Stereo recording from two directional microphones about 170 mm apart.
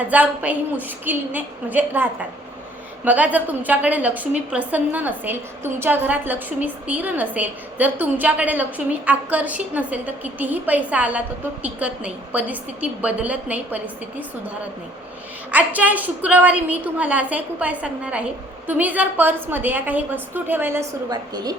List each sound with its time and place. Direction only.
0.0 s a woman's voice: 10° right (ahead or behind)
15.5 s a woman's voice: 10° right (ahead or behind)
21.1 s a woman's voice: 25° right (ahead or behind)